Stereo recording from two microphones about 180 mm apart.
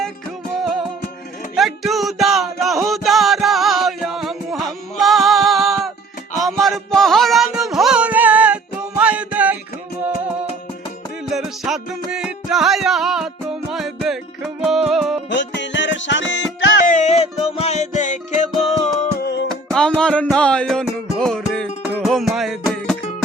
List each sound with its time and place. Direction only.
0.5 s music: centre (ahead or behind)
11.3 s music: centre (ahead or behind)
15.3 s music: 80° left
16.8 s music: 40° left (ahead or behind)
19.2 s music: 65° left (ahead or behind)
19.7 s music: 5° left (ahead or behind)